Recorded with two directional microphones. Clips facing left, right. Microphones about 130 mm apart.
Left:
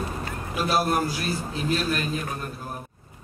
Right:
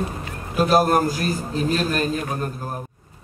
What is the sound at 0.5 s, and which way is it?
Music, 45° right (ahead or behind).